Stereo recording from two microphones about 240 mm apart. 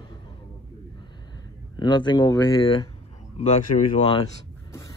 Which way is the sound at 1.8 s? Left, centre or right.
Centre.